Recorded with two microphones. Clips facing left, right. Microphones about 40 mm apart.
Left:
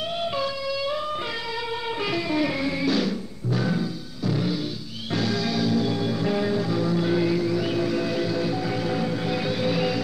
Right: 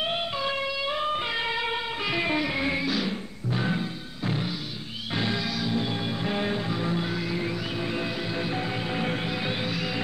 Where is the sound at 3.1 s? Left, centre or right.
Right.